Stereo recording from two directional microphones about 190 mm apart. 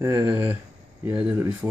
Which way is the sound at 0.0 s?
15° right (ahead or behind).